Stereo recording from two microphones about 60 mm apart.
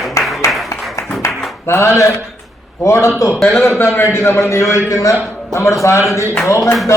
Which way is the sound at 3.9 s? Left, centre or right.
Left.